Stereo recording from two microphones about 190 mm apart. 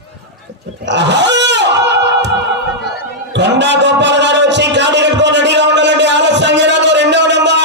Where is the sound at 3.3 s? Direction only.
65° right (ahead or behind).